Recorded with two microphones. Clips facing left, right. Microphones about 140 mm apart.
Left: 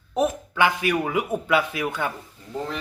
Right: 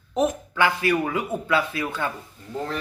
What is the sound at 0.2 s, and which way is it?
Speech, 15° left (ahead or behind).